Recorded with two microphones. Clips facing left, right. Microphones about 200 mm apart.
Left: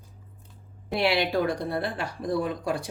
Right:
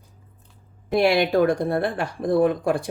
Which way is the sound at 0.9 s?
50° right (ahead or behind).